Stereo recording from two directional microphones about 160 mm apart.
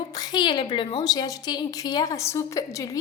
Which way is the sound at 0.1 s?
25° left (ahead or behind).